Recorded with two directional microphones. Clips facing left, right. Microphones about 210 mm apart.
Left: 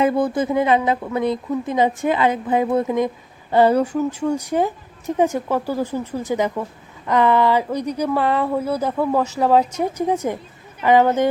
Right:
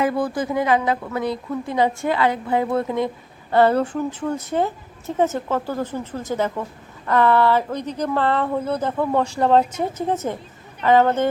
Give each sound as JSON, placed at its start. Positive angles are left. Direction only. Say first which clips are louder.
{"t": 0.0, "sound": "a woman's voice", "louder": "left 3 dB", "side_deg": 20}